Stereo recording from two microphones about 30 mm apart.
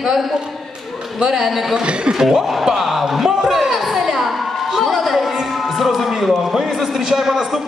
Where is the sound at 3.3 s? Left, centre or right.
Centre.